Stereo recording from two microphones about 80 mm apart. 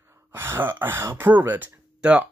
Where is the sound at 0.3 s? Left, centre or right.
Right.